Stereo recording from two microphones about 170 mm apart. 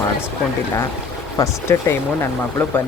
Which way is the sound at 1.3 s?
15° left (ahead or behind).